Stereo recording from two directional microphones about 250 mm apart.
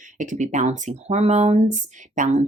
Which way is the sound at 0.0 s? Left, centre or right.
Right.